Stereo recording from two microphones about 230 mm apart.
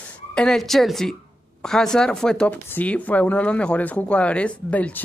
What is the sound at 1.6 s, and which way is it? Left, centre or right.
Speech, centre.